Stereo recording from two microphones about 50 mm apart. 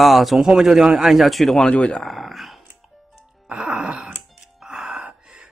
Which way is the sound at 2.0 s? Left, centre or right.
Centre.